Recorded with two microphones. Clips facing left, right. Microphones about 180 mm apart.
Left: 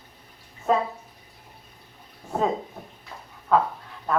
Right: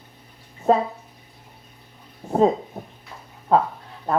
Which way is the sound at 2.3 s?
35° right (ahead or behind).